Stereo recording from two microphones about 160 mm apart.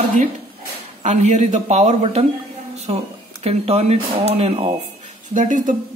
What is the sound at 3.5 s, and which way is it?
Speech, 40° right (ahead or behind).